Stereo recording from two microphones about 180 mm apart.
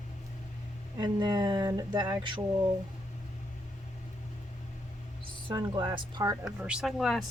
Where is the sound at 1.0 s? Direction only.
25° right (ahead or behind).